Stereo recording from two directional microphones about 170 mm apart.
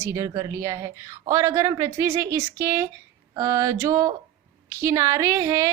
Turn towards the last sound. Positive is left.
turn(degrees=-15)  # may be behind; listen again after turning